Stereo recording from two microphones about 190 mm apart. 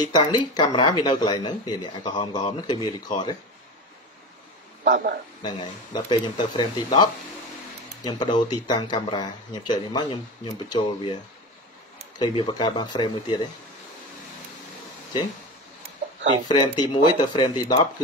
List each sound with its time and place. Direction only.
0.0 s speech: 25° left (ahead or behind)
4.8 s speech: 70° right (ahead or behind)
5.4 s speech: 25° left (ahead or behind)
12.2 s speech: 25° left (ahead or behind)
16.4 s speech: 25° left (ahead or behind)